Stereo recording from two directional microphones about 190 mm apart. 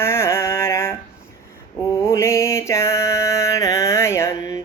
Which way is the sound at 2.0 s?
15° left (ahead or behind).